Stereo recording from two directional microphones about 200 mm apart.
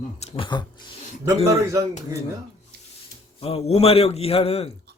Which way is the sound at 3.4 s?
30° left (ahead or behind).